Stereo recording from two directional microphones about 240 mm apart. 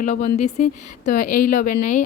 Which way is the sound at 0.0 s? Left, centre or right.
Left.